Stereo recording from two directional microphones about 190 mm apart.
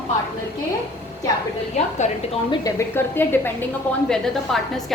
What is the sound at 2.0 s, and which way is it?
Speech, 35° left (ahead or behind).